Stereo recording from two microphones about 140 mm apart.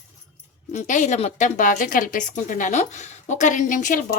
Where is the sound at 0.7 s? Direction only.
60° left (ahead or behind).